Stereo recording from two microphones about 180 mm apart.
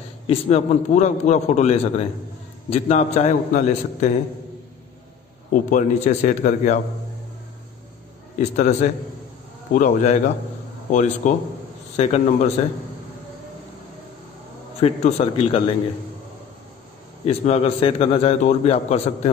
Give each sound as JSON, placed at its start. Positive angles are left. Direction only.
{"t": 0.3, "sound": "a man's voice", "side_deg": 35}
{"t": 5.5, "sound": "a man's voice", "side_deg": 45}
{"t": 8.4, "sound": "a man's voice", "side_deg": 40}
{"t": 14.8, "sound": "a man's voice", "side_deg": 35}
{"t": 17.3, "sound": "a man's voice", "side_deg": 35}